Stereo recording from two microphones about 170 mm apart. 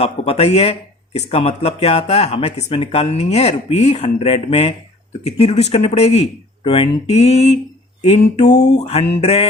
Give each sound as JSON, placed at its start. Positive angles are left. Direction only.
{"t": 0.0, "sound": "speech", "side_deg": 35}